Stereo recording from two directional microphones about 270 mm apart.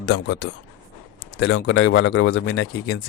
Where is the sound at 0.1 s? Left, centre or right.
Left.